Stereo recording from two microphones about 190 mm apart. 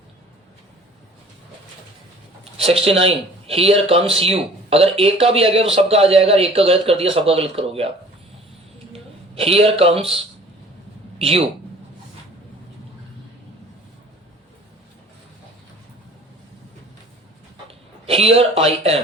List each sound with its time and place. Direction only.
2.4 s speech: 30° right (ahead or behind)
8.9 s a man's voice: 30° right (ahead or behind)
11.2 s speech: 30° right (ahead or behind)
18.0 s speech: 30° right (ahead or behind)